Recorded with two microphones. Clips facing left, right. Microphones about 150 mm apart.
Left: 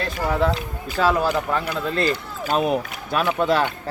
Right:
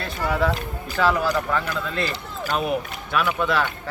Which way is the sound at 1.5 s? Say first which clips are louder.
Left 2 dB; 35° left (ahead or behind).